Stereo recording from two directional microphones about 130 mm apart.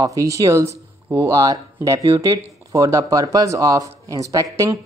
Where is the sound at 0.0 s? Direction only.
25° right (ahead or behind).